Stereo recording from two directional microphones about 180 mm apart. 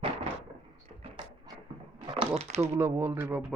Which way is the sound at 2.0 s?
25° right (ahead or behind).